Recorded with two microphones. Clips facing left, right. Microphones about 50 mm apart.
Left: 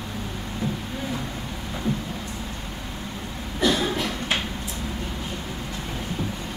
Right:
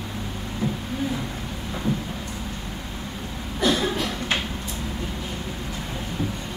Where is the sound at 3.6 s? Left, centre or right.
Right.